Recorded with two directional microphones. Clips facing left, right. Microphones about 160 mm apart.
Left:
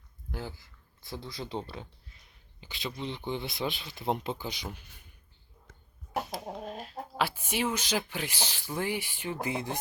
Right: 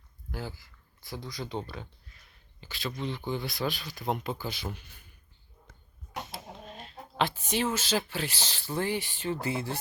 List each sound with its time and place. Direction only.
0.3 s speech: 20° left (ahead or behind)
6.5 s chicken: centre (ahead or behind)
7.2 s speech: 10° left (ahead or behind)